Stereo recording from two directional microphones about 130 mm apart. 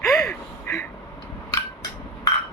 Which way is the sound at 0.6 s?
20° left (ahead or behind).